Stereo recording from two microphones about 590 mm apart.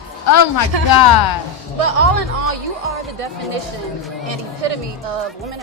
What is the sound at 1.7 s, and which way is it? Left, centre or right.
Speech, right.